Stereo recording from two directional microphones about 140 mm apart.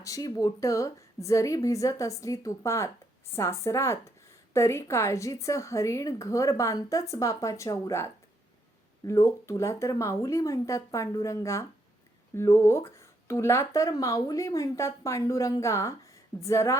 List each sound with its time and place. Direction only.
0.0 s speech: 25° left (ahead or behind)